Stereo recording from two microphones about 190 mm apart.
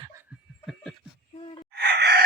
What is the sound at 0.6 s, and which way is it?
Snicker, centre (ahead or behind).